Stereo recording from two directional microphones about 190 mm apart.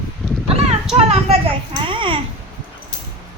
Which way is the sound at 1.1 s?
30° right (ahead or behind).